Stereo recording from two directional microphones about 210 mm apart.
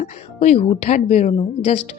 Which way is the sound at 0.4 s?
35° left (ahead or behind).